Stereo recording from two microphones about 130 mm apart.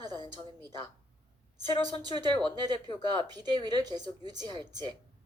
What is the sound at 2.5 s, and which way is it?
A woman's voice, 30° right (ahead or behind).